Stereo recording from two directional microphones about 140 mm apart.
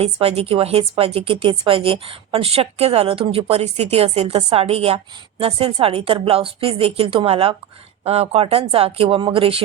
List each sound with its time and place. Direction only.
0.0 s a woman's voice: 45° right (ahead or behind)